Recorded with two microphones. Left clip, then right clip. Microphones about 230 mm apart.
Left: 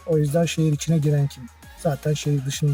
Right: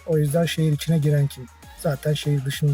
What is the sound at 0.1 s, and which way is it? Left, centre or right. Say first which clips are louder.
Speech: left 1 dB; centre.